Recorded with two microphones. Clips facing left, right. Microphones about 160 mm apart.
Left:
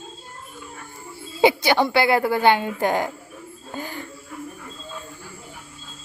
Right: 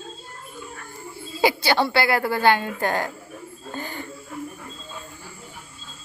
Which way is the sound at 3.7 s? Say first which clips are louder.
Even; 5° left (ahead or behind).